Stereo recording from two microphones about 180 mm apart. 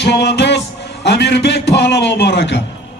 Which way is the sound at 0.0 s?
65° left (ahead or behind).